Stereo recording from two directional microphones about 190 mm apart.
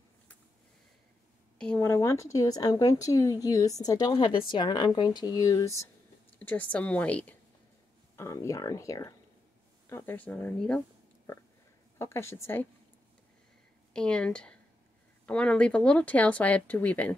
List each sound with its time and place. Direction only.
1.6 s a woman's voice: 10° left (ahead or behind)
12.0 s a woman's voice: 15° left (ahead or behind)
13.9 s a woman's voice: 5° left (ahead or behind)